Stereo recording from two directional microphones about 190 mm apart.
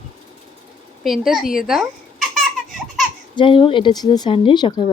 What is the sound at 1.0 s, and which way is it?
Speech, centre (ahead or behind).